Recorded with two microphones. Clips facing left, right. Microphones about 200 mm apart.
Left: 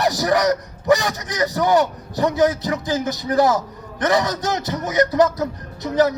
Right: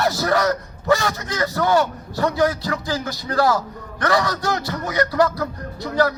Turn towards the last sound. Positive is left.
turn(degrees=20)  # may be behind; listen again after turning